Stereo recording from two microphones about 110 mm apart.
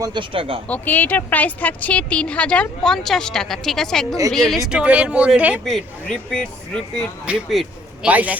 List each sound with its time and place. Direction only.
0.0 s speech: 45° right (ahead or behind)
0.7 s a woman's voice: 15° left (ahead or behind)
4.7 s a man's voice: 10° right (ahead or behind)
5.6 s a woman's voice: 5° left (ahead or behind)
7.3 s a man's voice: 5° right (ahead or behind)